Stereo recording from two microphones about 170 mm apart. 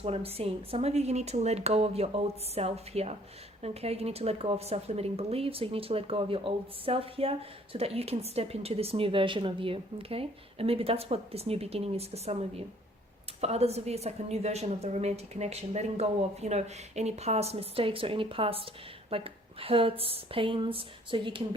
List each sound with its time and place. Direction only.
0.0 s speech: 35° right (ahead or behind)